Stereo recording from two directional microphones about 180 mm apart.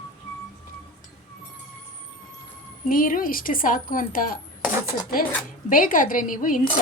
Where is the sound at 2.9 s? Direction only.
50° left (ahead or behind).